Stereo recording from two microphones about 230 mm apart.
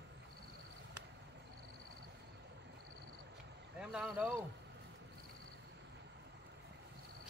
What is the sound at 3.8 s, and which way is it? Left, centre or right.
Boat, centre.